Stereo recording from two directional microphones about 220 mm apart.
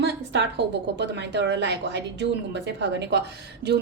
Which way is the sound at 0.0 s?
50° right (ahead or behind).